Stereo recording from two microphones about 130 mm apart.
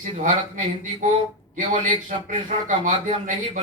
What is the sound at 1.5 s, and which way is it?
A man's voice, 80° right.